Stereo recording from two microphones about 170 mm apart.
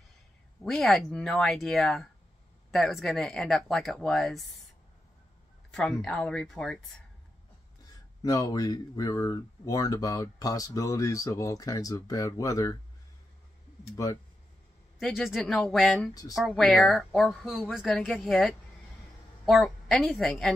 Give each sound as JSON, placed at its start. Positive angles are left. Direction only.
{"t": 0.7, "sound": "speech", "side_deg": 0}
{"t": 5.7, "sound": "speech", "side_deg": 5}
{"t": 8.2, "sound": "speech", "side_deg": 20}
{"t": 15.0, "sound": "speech", "side_deg": 0}